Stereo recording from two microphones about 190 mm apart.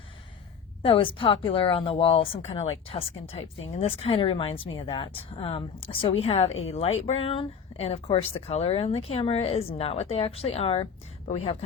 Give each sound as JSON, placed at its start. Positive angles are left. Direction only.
{"t": 0.8, "sound": "speech", "side_deg": 30}